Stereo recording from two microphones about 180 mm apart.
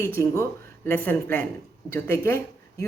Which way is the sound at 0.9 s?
10° left (ahead or behind).